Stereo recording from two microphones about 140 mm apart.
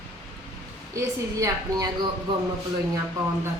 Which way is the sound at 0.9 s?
20° right (ahead or behind).